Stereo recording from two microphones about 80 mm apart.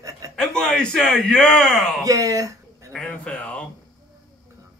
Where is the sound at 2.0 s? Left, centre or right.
Right.